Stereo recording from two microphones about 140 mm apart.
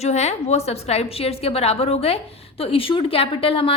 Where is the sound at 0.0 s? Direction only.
50° left (ahead or behind).